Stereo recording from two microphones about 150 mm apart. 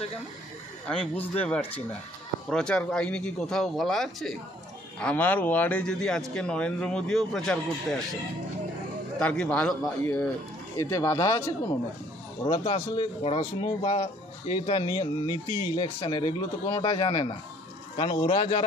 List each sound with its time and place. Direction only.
1.4 s a man's voice: 10° left (ahead or behind)
9.2 s a man's voice: 10° left (ahead or behind)
10.8 s speech: 20° left (ahead or behind)
12.4 s speech: 30° left (ahead or behind)
15.3 s speech: 20° right (ahead or behind)
15.7 s speech: 30° left (ahead or behind)